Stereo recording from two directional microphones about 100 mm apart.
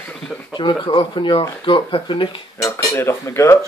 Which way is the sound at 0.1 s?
10° left (ahead or behind).